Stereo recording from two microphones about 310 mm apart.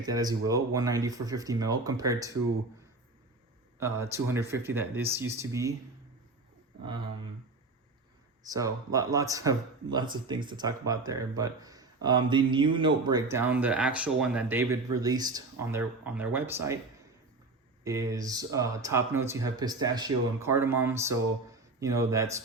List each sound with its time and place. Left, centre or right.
0.0 s speech: centre
3.8 s speech: centre
8.4 s speech: centre
17.8 s speech: centre